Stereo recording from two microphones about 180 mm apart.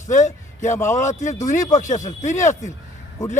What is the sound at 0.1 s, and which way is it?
A man's voice, 45° left (ahead or behind).